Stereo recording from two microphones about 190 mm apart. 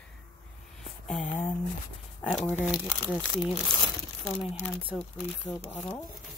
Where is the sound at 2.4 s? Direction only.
10° left (ahead or behind).